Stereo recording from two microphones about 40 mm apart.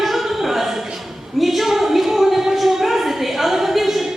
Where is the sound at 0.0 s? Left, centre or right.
Centre.